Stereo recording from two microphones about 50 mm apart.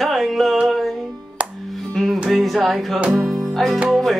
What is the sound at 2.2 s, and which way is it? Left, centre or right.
Speech, centre.